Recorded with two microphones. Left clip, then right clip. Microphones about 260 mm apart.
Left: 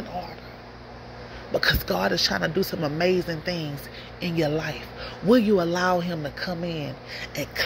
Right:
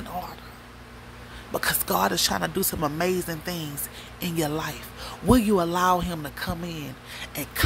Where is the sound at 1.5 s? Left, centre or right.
Centre.